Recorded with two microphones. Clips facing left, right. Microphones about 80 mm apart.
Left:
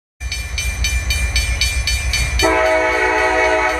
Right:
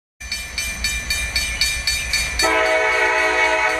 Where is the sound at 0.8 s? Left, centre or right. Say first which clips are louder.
Left 1 dB; right.